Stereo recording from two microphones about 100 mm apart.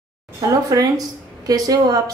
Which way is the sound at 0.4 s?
35° right (ahead or behind).